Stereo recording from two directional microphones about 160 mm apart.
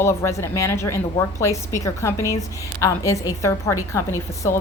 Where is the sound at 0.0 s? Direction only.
15° left (ahead or behind).